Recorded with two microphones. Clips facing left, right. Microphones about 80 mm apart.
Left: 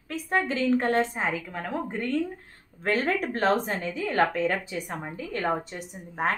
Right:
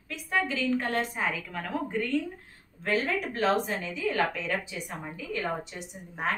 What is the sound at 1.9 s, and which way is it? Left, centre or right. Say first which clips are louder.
A woman's voice: left 1 dB; left.